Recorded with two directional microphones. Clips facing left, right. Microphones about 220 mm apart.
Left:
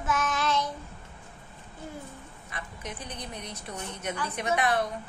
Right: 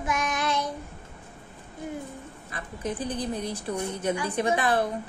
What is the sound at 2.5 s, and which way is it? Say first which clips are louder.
Speech: right 8 dB; 30° right (ahead or behind).